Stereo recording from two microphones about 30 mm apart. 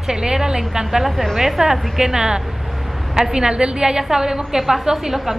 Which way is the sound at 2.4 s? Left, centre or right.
Centre.